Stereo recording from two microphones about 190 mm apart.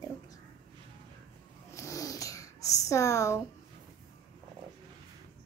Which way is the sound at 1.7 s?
15° left (ahead or behind).